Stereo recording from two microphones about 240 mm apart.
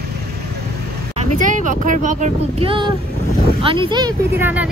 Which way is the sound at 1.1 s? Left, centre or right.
Right.